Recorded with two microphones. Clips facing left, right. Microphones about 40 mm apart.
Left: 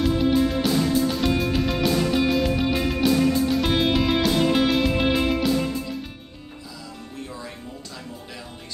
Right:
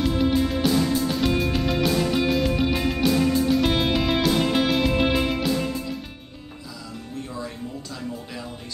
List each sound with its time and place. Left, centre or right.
0.0 s music: centre